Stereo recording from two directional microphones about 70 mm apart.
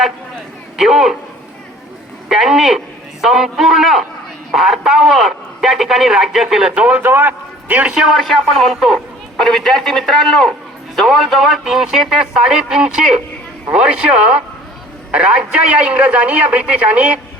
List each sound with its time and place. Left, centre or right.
0.8 s a man's voice: centre
2.3 s a man's voice: centre
7.0 s a man's voice: right
8.1 s a man's voice: centre